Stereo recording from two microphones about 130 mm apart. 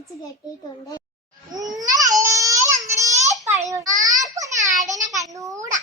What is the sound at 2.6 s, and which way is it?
Baby cry, 75° right (ahead or behind).